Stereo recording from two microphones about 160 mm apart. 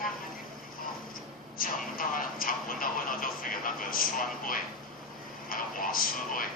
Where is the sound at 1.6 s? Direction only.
60° left (ahead or behind).